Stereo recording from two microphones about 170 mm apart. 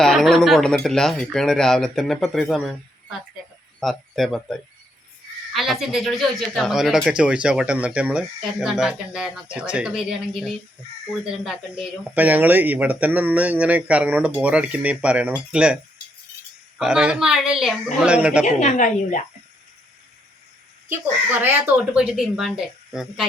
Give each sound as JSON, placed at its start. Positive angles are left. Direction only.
{"t": 0.0, "sound": "speech", "side_deg": 0}
{"t": 3.8, "sound": "speech", "side_deg": 0}
{"t": 5.5, "sound": "speech", "side_deg": 0}
{"t": 18.4, "sound": "speech", "side_deg": 45}
{"t": 21.2, "sound": "speech", "side_deg": -10}